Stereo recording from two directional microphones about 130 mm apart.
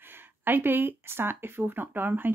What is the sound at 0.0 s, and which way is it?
Speech, 15° right (ahead or behind).